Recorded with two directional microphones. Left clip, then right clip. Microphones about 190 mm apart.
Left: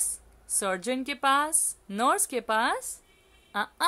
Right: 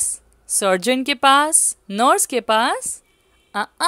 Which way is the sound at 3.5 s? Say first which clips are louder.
Right 6 dB; 40° right (ahead or behind).